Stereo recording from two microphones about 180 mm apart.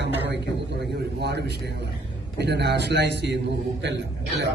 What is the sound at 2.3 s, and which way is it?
A man's voice, 65° right (ahead or behind).